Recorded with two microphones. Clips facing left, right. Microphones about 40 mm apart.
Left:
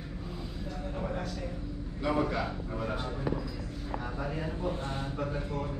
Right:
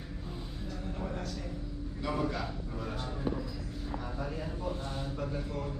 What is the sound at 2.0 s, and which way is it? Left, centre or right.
Speech, centre.